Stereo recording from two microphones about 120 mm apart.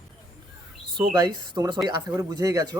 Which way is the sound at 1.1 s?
35° right (ahead or behind).